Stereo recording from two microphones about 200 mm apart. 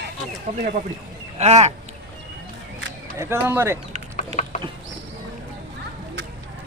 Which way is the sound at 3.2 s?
10° right (ahead or behind).